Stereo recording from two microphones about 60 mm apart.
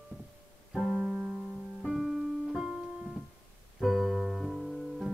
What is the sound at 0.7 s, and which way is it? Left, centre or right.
Keyboard, centre.